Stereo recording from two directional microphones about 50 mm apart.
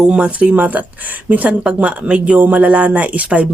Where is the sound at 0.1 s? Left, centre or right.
Right.